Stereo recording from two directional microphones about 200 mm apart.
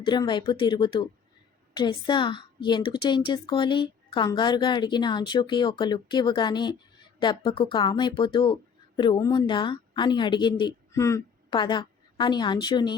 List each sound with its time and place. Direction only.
0.0 s a woman's voice: 20° left (ahead or behind)